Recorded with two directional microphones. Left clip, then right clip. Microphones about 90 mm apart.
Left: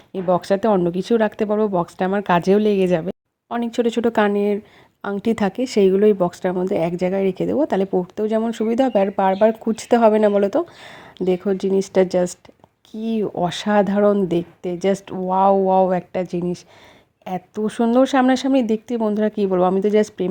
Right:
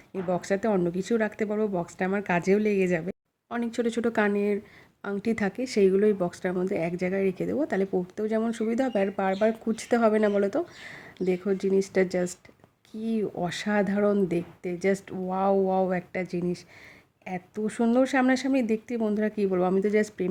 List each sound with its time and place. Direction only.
0.1 s speech: 45° left (ahead or behind)
3.0 s speech: 35° left (ahead or behind)
5.0 s a woman's voice: 45° left (ahead or behind)